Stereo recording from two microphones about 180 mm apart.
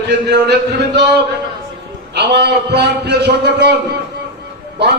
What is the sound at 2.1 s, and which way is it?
A man's voice, 70° right (ahead or behind).